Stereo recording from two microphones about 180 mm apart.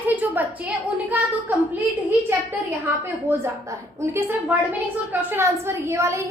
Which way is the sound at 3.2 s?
15° right (ahead or behind).